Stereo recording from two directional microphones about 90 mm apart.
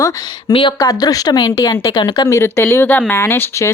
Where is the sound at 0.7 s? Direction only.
45° left (ahead or behind).